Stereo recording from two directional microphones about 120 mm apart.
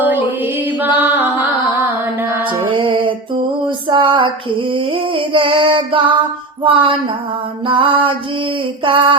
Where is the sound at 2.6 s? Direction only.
45° right (ahead or behind).